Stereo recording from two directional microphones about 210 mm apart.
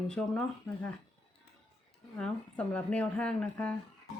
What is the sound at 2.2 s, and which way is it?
Speech, 5° left (ahead or behind).